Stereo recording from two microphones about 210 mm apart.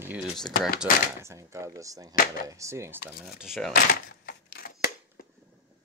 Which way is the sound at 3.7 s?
50° left (ahead or behind).